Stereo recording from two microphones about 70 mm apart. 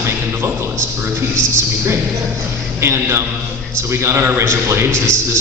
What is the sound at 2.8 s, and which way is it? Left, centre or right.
A man's voice, right.